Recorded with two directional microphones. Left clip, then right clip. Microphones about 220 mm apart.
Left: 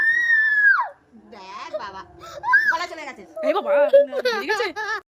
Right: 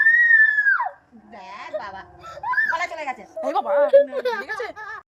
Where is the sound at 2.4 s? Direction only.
15° left (ahead or behind).